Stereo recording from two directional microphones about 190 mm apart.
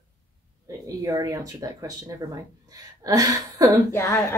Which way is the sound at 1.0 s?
15° right (ahead or behind).